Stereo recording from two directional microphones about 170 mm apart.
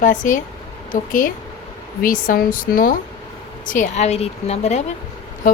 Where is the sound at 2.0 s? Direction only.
55° left (ahead or behind).